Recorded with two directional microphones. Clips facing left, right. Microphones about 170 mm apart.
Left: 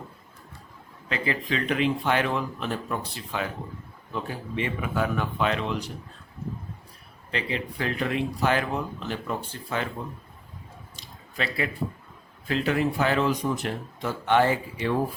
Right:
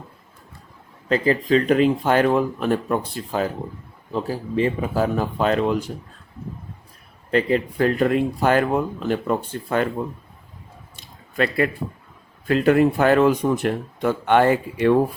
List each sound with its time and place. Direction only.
1.0 s speech: 40° right (ahead or behind)
7.3 s speech: 45° right (ahead or behind)
10.9 s a sound: 55° right (ahead or behind)
12.5 s speech: 55° right (ahead or behind)